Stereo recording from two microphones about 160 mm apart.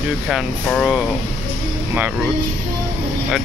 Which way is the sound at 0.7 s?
Centre (ahead or behind).